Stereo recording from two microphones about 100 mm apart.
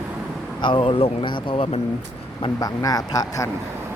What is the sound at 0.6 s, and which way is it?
Speech, 60° left (ahead or behind).